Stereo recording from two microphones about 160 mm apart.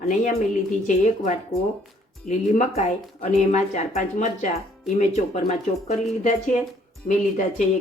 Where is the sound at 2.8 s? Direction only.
45° left (ahead or behind).